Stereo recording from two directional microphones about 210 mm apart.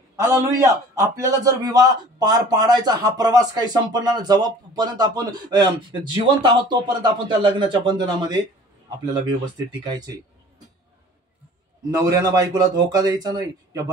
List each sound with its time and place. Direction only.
0.2 s a man's voice: 15° right (ahead or behind)
9.7 s speech: 20° right (ahead or behind)
11.9 s a man's voice: 15° right (ahead or behind)